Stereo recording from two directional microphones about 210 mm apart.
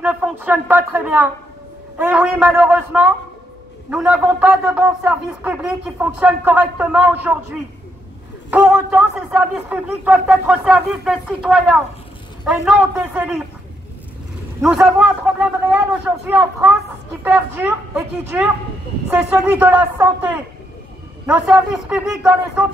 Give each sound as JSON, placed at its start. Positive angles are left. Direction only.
{"t": 0.0, "sound": "a man's voice", "side_deg": -10}
{"t": 8.5, "sound": "a man's voice", "side_deg": -5}
{"t": 14.9, "sound": "a man's voice", "side_deg": -5}
{"t": 16.3, "sound": "a man's voice", "side_deg": -10}
{"t": 21.3, "sound": "a man's voice", "side_deg": -5}